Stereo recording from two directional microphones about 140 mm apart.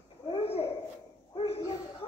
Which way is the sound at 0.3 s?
45° left (ahead or behind).